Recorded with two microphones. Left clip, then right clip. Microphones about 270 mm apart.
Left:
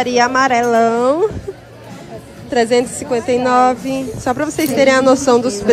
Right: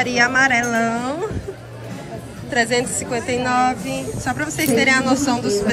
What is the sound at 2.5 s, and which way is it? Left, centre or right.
A woman's voice, centre.